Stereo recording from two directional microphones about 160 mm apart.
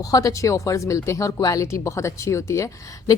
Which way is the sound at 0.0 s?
20° left (ahead or behind).